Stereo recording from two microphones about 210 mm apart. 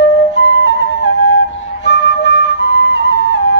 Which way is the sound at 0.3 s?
60° left (ahead or behind).